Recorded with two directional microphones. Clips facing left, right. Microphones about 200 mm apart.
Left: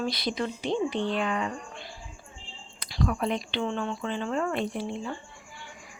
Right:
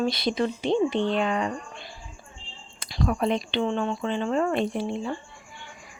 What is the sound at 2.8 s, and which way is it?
Speech, 25° right (ahead or behind).